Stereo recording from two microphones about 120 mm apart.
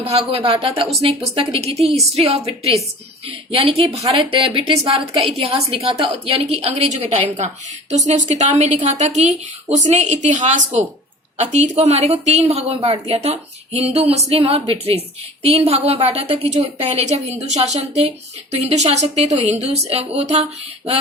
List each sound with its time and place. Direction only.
0.3 s a woman's voice: 50° right (ahead or behind)